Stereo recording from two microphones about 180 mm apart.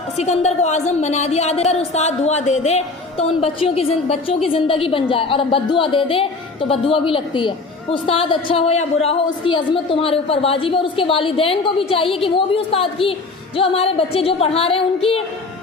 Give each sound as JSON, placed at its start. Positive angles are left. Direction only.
{"t": 0.2, "sound": "a woman's voice", "side_deg": 40}